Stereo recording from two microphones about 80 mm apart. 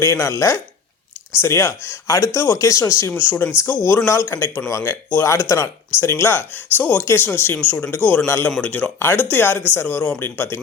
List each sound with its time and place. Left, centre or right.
0.0 s speech: left